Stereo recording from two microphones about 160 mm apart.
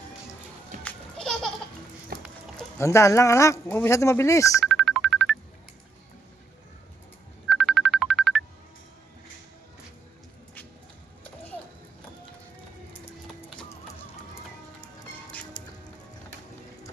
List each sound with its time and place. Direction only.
0.8 s children playing: 5° left (ahead or behind)
2.1 s run: 70° right (ahead or behind)
2.7 s speech: 20° left (ahead or behind)
4.6 s music: centre (ahead or behind)
7.5 s music: centre (ahead or behind)